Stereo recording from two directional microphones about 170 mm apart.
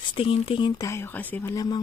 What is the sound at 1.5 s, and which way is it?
Speech, 25° left (ahead or behind).